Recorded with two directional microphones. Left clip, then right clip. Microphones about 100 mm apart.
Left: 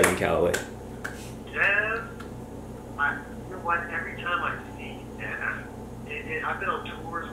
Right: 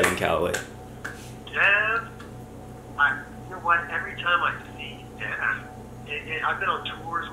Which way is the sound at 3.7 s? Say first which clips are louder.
Right 4 dB; 25° right (ahead or behind).